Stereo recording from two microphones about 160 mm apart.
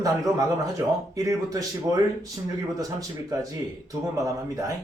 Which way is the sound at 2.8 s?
20° right (ahead or behind).